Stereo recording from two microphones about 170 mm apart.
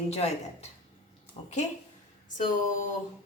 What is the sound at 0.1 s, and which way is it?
A woman's voice, 40° left (ahead or behind).